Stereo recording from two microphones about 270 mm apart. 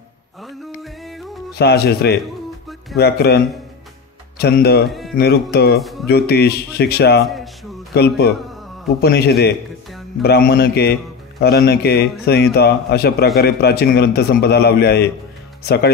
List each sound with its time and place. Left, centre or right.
0.8 s music: centre
1.6 s a man's voice: left
4.4 s a man's voice: left
4.8 s speech: centre
5.1 s a man's voice: left
5.8 s speech: centre
6.0 s a man's voice: left